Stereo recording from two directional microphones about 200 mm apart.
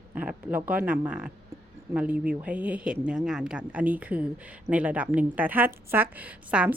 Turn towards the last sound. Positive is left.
turn(degrees=-5)  # may be behind; listen again after turning